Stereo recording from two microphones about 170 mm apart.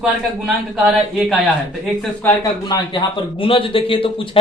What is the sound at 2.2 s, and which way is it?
Speech, 20° left (ahead or behind).